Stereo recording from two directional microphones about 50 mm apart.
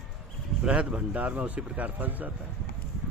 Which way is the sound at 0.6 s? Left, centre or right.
Right.